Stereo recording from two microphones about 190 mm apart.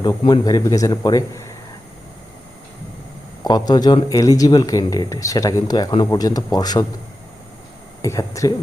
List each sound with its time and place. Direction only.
0.0 s speech: 20° left (ahead or behind)
3.4 s speech: 20° left (ahead or behind)
8.0 s speech: 15° left (ahead or behind)